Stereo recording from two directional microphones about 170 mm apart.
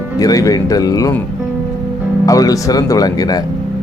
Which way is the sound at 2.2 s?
20° left (ahead or behind).